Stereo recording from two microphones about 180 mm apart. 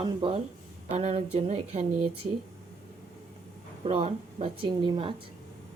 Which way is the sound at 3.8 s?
35° right (ahead or behind).